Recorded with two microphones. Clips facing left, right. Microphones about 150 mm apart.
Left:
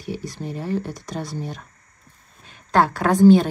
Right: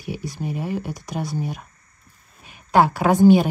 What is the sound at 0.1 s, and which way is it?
Speech, 5° right (ahead or behind).